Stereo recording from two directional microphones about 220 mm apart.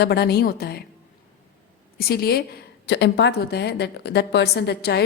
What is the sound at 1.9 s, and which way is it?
A woman's voice, 45° left (ahead or behind).